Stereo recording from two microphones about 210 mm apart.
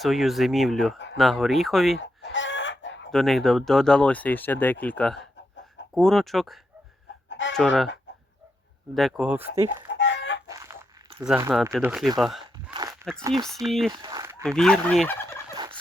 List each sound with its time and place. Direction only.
0.0 s speech: centre (ahead or behind)
2.0 s chicken: 60° left (ahead or behind)
3.1 s speech: centre (ahead or behind)
7.3 s chicken: 65° left (ahead or behind)
7.5 s speech: centre (ahead or behind)
9.0 s speech: centre (ahead or behind)
9.9 s chicken: 60° left (ahead or behind)
10.5 s a sound: 15° right (ahead or behind)
11.3 s speech: 10° right (ahead or behind)
12.2 s a sound: centre (ahead or behind)
13.1 s speech: centre (ahead or behind)
13.9 s a sound: 20° right (ahead or behind)
14.4 s speech: 5° left (ahead or behind)
15.5 s turkey: 20° right (ahead or behind)